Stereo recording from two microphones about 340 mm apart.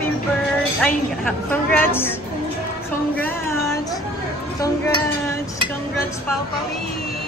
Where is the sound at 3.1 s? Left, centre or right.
Centre.